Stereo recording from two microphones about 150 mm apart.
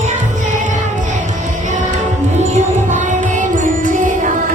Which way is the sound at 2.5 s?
55° right (ahead or behind).